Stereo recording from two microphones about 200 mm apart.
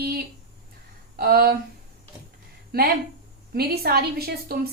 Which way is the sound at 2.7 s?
50° right (ahead or behind).